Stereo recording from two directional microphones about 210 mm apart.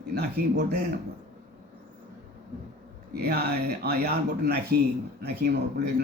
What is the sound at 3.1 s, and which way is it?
Speech, 50° right (ahead or behind).